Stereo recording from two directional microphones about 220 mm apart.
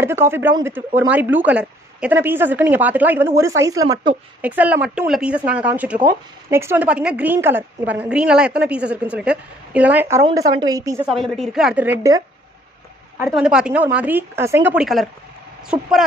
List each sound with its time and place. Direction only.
0.0 s a woman's voice: 10° right (ahead or behind)
11.1 s a woman's voice: centre (ahead or behind)
13.2 s speech: 5° right (ahead or behind)